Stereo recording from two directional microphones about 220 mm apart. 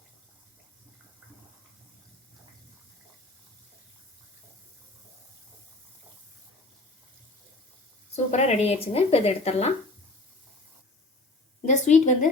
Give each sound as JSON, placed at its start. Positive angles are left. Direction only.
{"t": 8.1, "sound": "speech", "side_deg": 30}
{"t": 11.6, "sound": "a woman's voice", "side_deg": 35}